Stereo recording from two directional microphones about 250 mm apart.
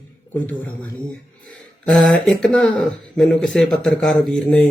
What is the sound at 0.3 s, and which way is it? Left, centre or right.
Speech, centre.